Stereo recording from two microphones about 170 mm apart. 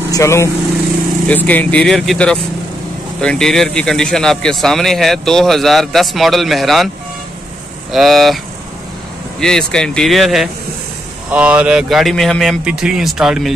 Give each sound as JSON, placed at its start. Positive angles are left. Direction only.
{"t": 0.1, "sound": "speech", "side_deg": 15}
{"t": 7.9, "sound": "speech", "side_deg": 0}
{"t": 9.4, "sound": "speech", "side_deg": 5}